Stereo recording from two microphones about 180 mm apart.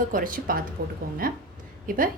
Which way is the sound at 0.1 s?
50° right (ahead or behind).